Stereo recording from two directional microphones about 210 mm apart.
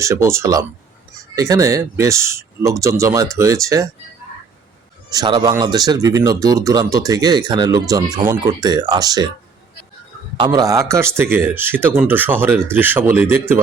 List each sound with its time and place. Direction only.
0.0 s speech: 15° right (ahead or behind)
5.1 s speech: 20° right (ahead or behind)
10.3 s speech: 20° right (ahead or behind)